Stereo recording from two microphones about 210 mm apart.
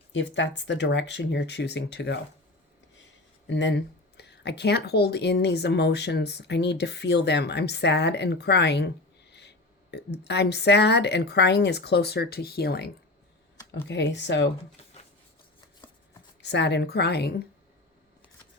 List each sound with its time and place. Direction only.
0.1 s speech: 60° left (ahead or behind)
3.4 s speech: 60° left (ahead or behind)
16.4 s speech: 55° left (ahead or behind)